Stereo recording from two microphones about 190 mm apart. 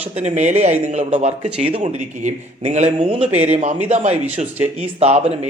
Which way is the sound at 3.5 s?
35° right (ahead or behind).